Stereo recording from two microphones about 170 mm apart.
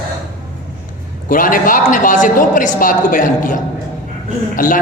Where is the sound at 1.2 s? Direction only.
55° left (ahead or behind).